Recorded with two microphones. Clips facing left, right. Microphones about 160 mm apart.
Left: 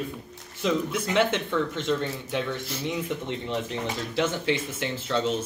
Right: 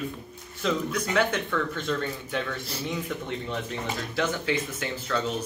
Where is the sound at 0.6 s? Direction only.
25° left (ahead or behind).